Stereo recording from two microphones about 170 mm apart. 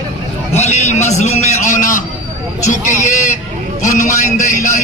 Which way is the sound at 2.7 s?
50° left (ahead or behind).